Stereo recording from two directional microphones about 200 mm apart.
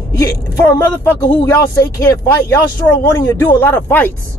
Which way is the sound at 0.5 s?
15° left (ahead or behind).